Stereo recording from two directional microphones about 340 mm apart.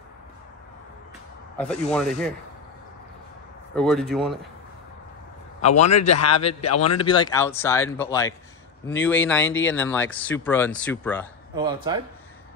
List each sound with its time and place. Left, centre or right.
1.6 s speech: centre
3.7 s speech: centre
5.7 s a man's voice: left
6.2 s speech: centre
6.6 s a man's voice: left
7.0 s speech: centre
11.5 s speech: centre